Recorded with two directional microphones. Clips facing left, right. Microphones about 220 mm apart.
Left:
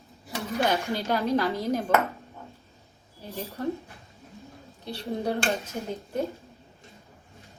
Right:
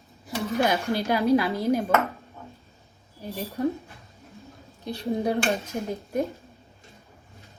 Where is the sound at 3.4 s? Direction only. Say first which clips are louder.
Right 3 dB; 15° right (ahead or behind).